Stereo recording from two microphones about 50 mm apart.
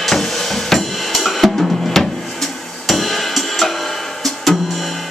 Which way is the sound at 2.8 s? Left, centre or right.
Centre.